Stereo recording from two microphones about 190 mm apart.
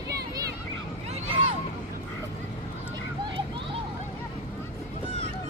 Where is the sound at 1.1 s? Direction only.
35° right (ahead or behind).